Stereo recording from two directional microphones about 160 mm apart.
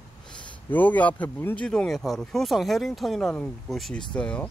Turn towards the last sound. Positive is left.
turn(degrees=5)  # may be behind; listen again after turning